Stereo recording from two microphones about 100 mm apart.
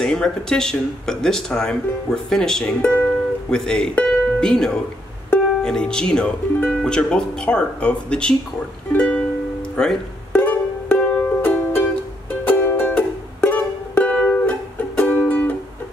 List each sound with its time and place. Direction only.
0.0 s speech: 5° left (ahead or behind)
2.8 s speech: 20° left (ahead or behind)
3.4 s speech: 5° left (ahead or behind)
8.9 s music: 10° left (ahead or behind)
9.8 s speech: 5° left (ahead or behind)
10.3 s music: 20° left (ahead or behind)